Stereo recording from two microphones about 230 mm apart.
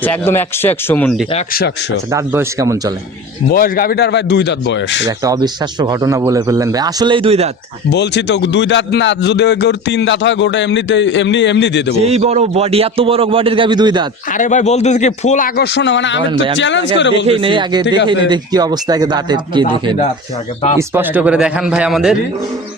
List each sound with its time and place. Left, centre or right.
0.0 s speech: centre
2.1 s speech: centre
3.5 s a man's voice: left
5.0 s speech: centre
7.9 s a man's voice: left
12.0 s a man's voice: right
14.3 s a man's voice: left
17.2 s a man's voice: right
17.8 s a man's voice: left
18.3 s speech: centre
20.7 s a man's voice: centre